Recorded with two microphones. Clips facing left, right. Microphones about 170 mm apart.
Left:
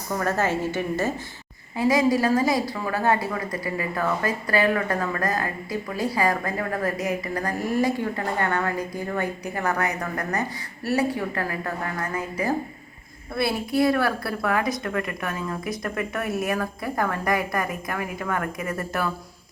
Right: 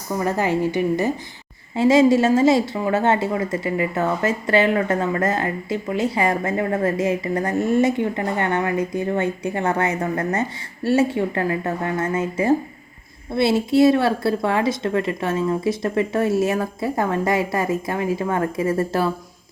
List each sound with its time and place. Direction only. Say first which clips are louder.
0.1 s a woman's voice: right 3 dB; 15° right (ahead or behind)
1.7 s speech: right 6 dB; 25° right (ahead or behind)